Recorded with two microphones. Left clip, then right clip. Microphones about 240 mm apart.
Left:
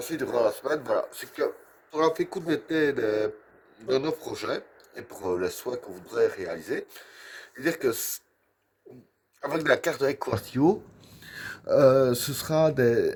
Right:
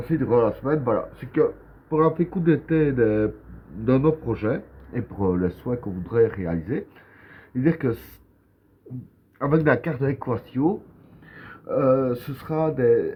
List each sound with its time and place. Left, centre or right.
0.1 s speech: left
9.5 s speech: left